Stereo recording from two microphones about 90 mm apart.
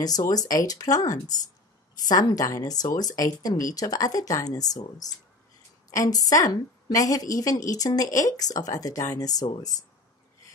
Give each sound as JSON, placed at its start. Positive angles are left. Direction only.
{"t": 0.0, "sound": "a woman's voice", "side_deg": 45}